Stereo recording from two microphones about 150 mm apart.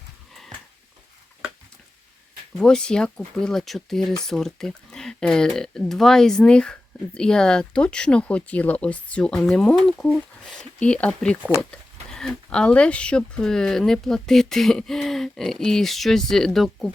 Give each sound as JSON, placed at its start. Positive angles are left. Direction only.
{"t": 2.6, "sound": "speech", "side_deg": 5}